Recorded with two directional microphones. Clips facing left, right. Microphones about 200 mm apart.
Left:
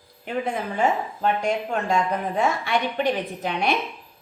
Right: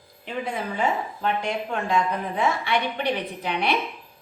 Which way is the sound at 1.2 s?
40° left (ahead or behind).